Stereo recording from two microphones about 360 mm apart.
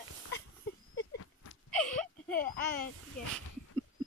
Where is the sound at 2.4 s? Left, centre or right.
Left.